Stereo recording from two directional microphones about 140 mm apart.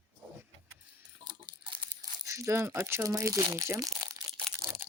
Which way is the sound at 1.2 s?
35° right (ahead or behind).